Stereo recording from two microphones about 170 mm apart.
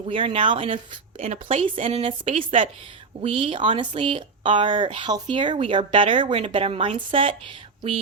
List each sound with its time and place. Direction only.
0.1 s speech: 30° right (ahead or behind)
1.2 s a woman's voice: 45° right (ahead or behind)
1.6 s speech: 30° right (ahead or behind)